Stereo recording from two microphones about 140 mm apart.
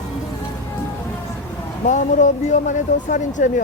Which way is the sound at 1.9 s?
60° left (ahead or behind).